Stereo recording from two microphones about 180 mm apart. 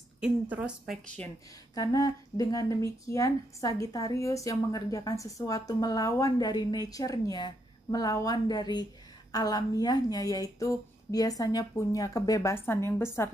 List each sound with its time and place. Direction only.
0.2 s a woman's voice: 5° right (ahead or behind)
1.8 s speech: 20° left (ahead or behind)